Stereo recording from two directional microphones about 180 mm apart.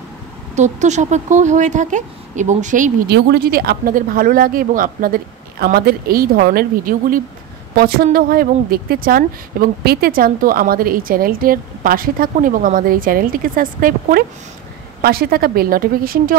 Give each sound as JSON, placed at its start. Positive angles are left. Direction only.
{"t": 0.6, "sound": "speech", "side_deg": -40}
{"t": 3.1, "sound": "a woman's voice", "side_deg": -60}